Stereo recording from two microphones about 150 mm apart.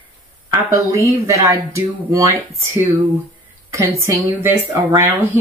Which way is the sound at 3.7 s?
20° right (ahead or behind).